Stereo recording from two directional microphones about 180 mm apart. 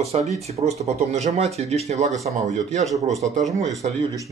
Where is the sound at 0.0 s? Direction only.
35° right (ahead or behind).